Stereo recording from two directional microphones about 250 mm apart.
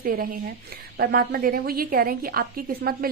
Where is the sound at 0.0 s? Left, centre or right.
Right.